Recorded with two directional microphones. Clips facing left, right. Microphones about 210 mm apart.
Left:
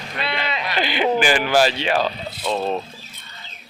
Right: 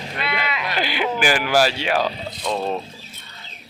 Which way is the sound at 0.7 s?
10° right (ahead or behind).